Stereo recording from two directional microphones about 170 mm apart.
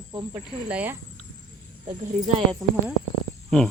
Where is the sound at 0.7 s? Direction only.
10° right (ahead or behind).